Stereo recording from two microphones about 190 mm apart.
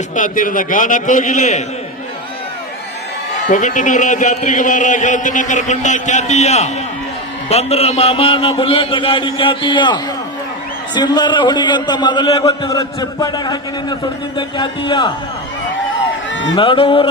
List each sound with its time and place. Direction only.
0.2 s a man's voice: 45° left (ahead or behind)
3.5 s a man's voice: 40° left (ahead or behind); by 15.1 s 25° left (ahead or behind)
16.6 s a man's voice: 25° left (ahead or behind)